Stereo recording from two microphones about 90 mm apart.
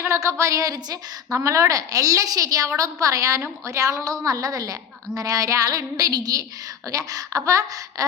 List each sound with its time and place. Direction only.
0.0 s a woman's voice: 35° right (ahead or behind)